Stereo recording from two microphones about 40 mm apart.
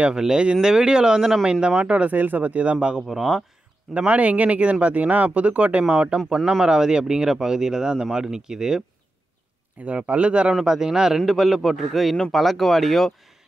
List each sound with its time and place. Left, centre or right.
0.1 s speech: centre
1.9 s speech: right
2.1 s speech: right
3.1 s speech: centre
3.9 s speech: right
6.6 s speech: centre
9.8 s speech: right
10.6 s speech: centre